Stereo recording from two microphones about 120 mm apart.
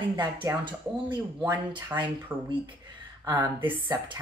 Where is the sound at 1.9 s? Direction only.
15° right (ahead or behind).